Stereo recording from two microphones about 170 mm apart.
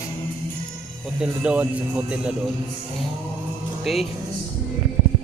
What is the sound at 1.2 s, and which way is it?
Speech, 5° right (ahead or behind).